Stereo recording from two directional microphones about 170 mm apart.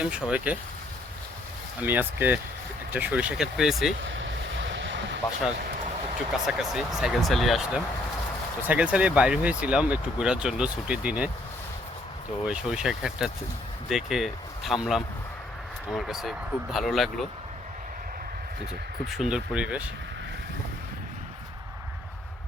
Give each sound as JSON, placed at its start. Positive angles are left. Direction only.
{"t": 0.0, "sound": "speech", "side_deg": -5}
{"t": 1.8, "sound": "speech", "side_deg": -10}
{"t": 4.5, "sound": "waves", "side_deg": -90}
{"t": 6.5, "sound": "speech", "side_deg": -5}
{"t": 12.5, "sound": "speech", "side_deg": -5}
{"t": 19.0, "sound": "speech", "side_deg": 0}